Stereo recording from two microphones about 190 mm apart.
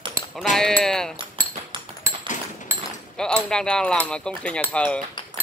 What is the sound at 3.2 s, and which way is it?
Speech, 5° left (ahead or behind).